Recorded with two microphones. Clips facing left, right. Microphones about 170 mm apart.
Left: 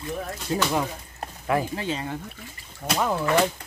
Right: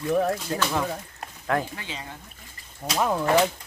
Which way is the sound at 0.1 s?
60° right (ahead or behind).